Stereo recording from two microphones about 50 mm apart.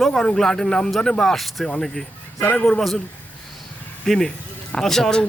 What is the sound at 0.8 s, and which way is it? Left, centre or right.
Speech, centre.